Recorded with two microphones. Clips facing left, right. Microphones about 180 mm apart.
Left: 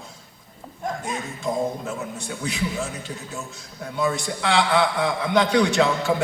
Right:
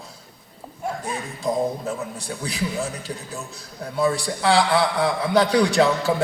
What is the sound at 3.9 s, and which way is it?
A man's voice, 35° right (ahead or behind).